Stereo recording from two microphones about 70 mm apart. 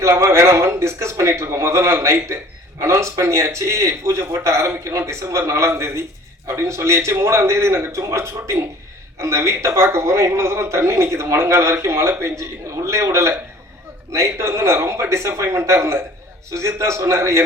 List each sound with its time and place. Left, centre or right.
0.0 s a man's voice: right